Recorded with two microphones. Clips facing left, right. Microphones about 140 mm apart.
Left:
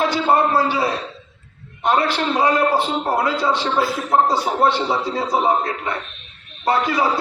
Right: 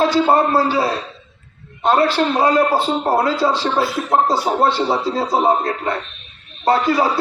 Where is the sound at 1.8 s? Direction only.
35° right (ahead or behind).